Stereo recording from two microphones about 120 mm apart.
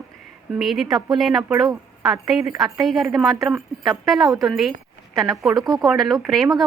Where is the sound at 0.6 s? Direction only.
Centre (ahead or behind).